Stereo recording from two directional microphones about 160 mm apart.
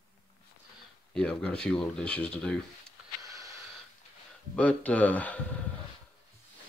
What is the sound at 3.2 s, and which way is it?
Snort, 20° right (ahead or behind).